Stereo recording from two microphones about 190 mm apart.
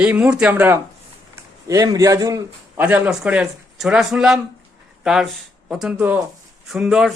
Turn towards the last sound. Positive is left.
turn(degrees=-5)  # may be behind; listen again after turning